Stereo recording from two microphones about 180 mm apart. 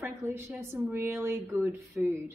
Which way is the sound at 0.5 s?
15° right (ahead or behind).